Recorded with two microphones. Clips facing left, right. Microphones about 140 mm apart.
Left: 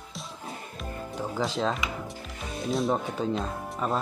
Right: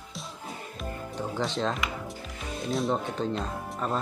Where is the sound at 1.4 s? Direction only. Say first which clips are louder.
Left 1 dB; centre (ahead or behind).